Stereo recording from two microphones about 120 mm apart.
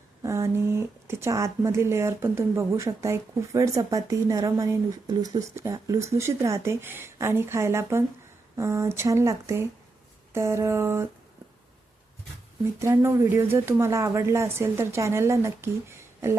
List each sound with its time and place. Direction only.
0.2 s speech: 25° right (ahead or behind)
12.8 s speech: 20° right (ahead or behind)